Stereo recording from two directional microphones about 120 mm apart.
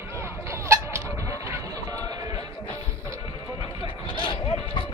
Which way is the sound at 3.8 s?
40° left (ahead or behind).